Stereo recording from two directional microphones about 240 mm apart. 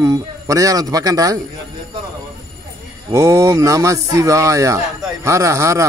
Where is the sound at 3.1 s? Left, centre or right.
Centre.